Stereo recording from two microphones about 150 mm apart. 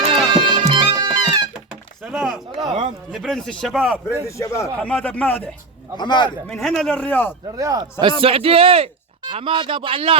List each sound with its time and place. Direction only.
0.3 s music: 30° right (ahead or behind)
2.1 s a sound: 10° right (ahead or behind)
2.6 s a sound: 30° right (ahead or behind)
3.1 s speech: centre (ahead or behind)
4.3 s a man's voice: 20° left (ahead or behind)
4.8 s speech: 10° left (ahead or behind)
6.0 s a man's voice: 30° left (ahead or behind)
6.5 s speech: 5° left (ahead or behind)
7.5 s speech: 20° right (ahead or behind)